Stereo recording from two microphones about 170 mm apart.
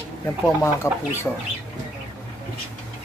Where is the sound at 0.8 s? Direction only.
15° left (ahead or behind).